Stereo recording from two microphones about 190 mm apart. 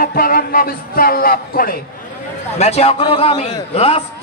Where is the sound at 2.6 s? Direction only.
30° left (ahead or behind).